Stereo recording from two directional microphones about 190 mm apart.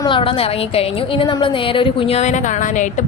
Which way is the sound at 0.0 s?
25° left (ahead or behind).